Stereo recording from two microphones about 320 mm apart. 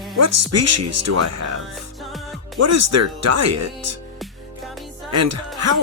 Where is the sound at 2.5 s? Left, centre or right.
Right.